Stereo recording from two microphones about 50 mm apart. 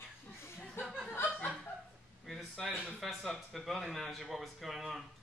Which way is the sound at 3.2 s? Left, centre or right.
Centre.